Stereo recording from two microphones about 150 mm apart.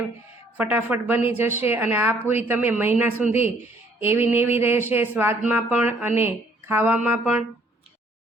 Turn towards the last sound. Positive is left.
turn(degrees=-10)  # may be behind; listen again after turning